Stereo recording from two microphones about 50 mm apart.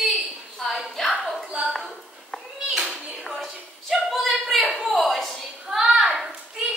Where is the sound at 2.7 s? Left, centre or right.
Centre.